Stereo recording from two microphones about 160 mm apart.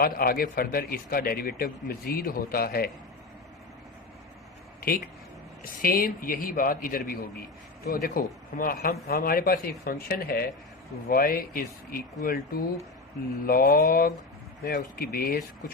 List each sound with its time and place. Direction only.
0.0 s speech: 70° left (ahead or behind)
4.8 s a man's voice: 65° left (ahead or behind)